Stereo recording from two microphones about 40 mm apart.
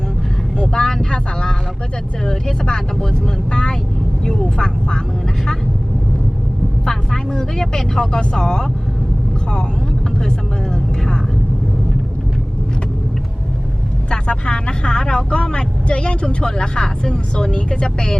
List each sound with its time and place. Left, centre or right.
0.5 s vehicle: left
0.8 s vehicle: centre
1.1 s speech: centre
6.8 s speech: centre
14.1 s speech: left